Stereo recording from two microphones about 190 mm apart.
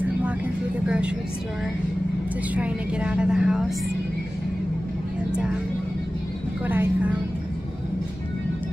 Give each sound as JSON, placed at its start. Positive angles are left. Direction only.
{"t": 0.8, "sound": "a woman's voice", "side_deg": -5}
{"t": 2.5, "sound": "a woman's voice", "side_deg": -5}